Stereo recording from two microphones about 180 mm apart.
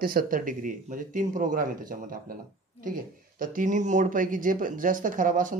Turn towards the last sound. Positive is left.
turn(degrees=-45)  # may be behind; listen again after turning